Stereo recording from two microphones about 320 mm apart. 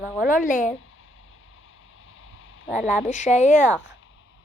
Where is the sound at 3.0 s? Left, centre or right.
Left.